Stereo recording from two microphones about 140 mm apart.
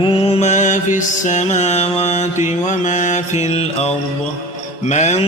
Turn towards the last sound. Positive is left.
turn(degrees=55)  # may be behind; listen again after turning